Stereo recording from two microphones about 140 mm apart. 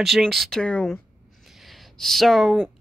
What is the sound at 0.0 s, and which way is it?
A woman's voice, centre (ahead or behind).